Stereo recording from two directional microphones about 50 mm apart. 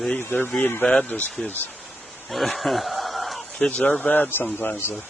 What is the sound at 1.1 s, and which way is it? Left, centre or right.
Speech, left.